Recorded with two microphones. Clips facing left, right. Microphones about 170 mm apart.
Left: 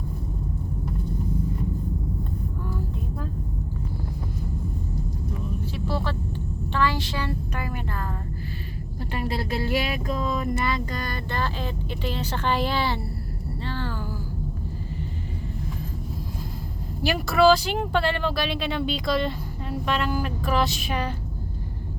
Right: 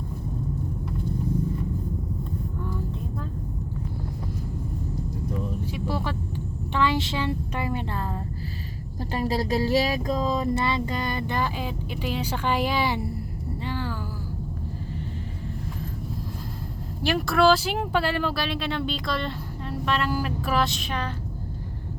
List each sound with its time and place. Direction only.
5.7 s vehicle: 15° right (ahead or behind)
9.1 s speech: 35° right (ahead or behind); by 13.1 s 15° right (ahead or behind)
13.7 s a sound: 10° right (ahead or behind)
17.0 s speech: centre (ahead or behind)